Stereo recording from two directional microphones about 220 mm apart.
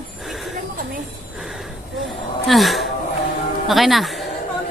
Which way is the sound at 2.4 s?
Centre (ahead or behind).